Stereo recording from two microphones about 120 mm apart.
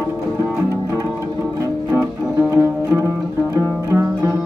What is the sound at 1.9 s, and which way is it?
Music, 20° right (ahead or behind).